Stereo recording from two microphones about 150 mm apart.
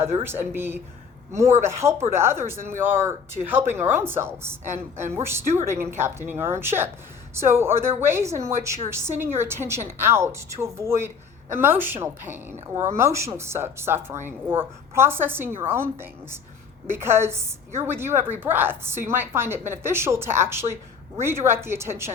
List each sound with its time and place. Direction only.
0.0 s a woman's voice: 15° right (ahead or behind)